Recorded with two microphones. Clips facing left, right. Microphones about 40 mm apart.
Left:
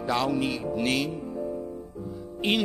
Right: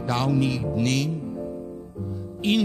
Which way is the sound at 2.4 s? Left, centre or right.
Centre.